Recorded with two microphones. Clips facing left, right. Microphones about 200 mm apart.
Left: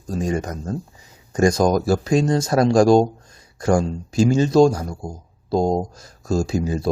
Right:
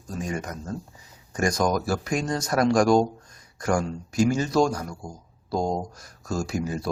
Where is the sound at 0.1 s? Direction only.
30° left (ahead or behind).